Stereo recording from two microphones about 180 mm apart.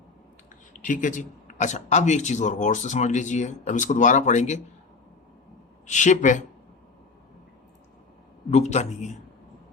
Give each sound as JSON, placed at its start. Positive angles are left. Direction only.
{"t": 0.7, "sound": "speech", "side_deg": 45}
{"t": 5.8, "sound": "speech", "side_deg": 40}
{"t": 8.4, "sound": "speech", "side_deg": 40}